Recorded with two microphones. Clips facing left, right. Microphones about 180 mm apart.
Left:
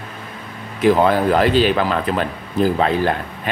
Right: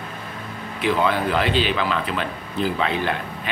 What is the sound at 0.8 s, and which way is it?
Speech, 45° left (ahead or behind).